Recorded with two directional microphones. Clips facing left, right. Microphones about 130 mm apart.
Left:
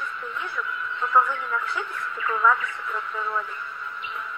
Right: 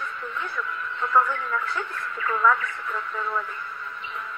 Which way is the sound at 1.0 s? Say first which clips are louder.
Even; 15° left (ahead or behind).